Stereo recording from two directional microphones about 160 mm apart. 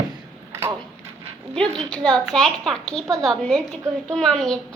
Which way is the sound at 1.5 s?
5° left (ahead or behind).